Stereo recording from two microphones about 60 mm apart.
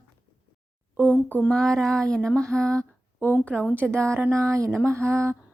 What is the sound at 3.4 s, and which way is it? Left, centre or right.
Speech, left.